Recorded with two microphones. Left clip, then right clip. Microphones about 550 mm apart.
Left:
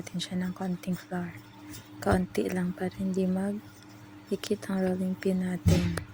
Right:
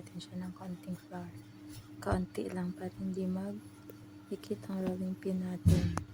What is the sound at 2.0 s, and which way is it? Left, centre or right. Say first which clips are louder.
Speech: left 8 dB; right.